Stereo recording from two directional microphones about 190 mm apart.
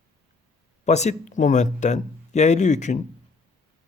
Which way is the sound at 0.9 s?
35° left (ahead or behind).